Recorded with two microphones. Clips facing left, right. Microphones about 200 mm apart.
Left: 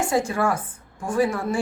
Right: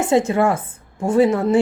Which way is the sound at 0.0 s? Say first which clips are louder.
Right 6 dB; 20° right (ahead or behind).